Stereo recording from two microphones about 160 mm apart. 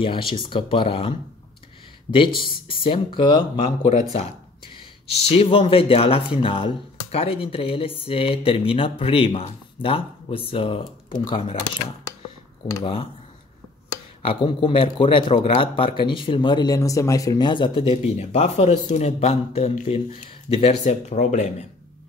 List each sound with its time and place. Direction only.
0.0 s speech: 35° left (ahead or behind)
5.1 s speech: 35° left (ahead or behind)
12.8 s speech: 35° left (ahead or behind)
14.4 s speech: 30° left (ahead or behind); by 21.6 s 50° left (ahead or behind)